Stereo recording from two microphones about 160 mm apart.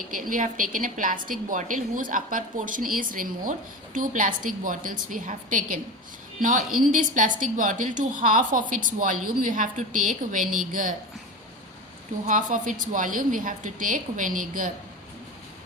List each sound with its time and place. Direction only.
0.2 s a woman's voice: 55° right (ahead or behind)
12.2 s a woman's voice: 55° right (ahead or behind)